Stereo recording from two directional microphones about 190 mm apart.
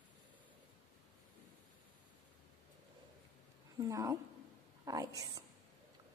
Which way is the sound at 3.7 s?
15° right (ahead or behind).